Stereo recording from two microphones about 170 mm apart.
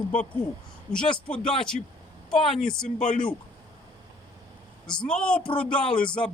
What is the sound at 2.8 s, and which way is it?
Speech, 50° left (ahead or behind).